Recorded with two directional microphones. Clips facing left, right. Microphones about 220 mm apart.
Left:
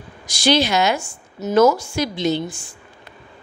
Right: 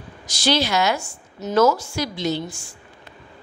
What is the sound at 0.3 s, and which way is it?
A woman's voice, 15° left (ahead or behind).